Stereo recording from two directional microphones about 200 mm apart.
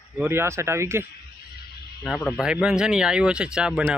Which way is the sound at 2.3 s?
5° right (ahead or behind).